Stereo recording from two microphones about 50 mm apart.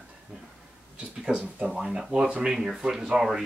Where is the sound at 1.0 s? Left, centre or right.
Centre.